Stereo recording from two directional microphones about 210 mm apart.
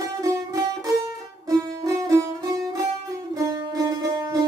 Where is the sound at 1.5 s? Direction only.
15° right (ahead or behind).